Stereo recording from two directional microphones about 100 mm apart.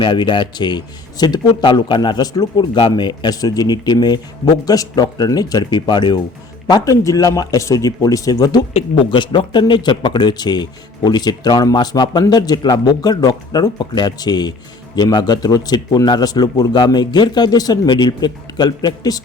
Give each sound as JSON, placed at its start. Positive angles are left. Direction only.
{"t": 0.0, "sound": "speech", "side_deg": 55}
{"t": 6.7, "sound": "a man's voice", "side_deg": 40}
{"t": 8.7, "sound": "speech", "side_deg": 60}